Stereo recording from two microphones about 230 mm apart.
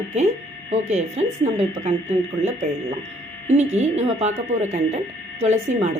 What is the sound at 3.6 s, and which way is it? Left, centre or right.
Speech, right.